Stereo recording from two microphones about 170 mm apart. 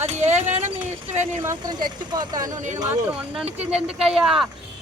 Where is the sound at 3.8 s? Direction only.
35° right (ahead or behind).